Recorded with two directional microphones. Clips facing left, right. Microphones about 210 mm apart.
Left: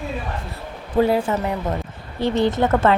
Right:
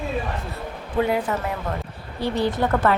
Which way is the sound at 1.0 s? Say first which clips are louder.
Left 4 dB; 30° left (ahead or behind).